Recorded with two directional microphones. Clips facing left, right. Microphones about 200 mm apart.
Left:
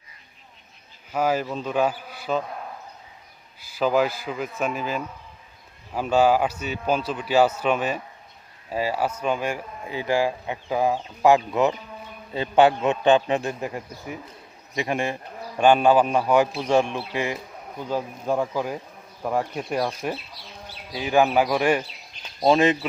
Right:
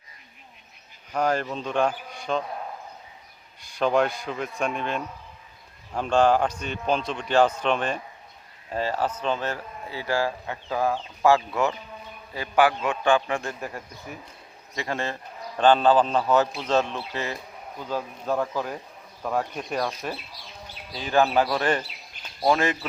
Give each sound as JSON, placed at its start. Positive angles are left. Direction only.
{"t": 1.1, "sound": "speech", "side_deg": 5}
{"t": 3.6, "sound": "a man's voice", "side_deg": 5}